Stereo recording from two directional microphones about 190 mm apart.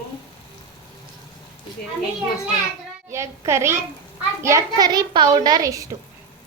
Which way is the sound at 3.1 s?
15° right (ahead or behind).